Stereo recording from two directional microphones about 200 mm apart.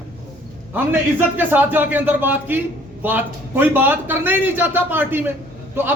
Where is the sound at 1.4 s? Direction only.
10° right (ahead or behind).